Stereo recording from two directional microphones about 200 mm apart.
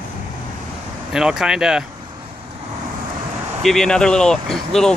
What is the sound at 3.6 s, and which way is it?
Speech, centre (ahead or behind).